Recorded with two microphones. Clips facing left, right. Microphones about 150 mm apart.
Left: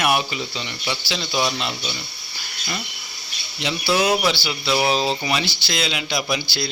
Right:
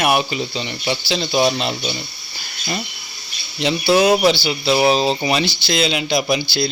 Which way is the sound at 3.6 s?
30° right (ahead or behind).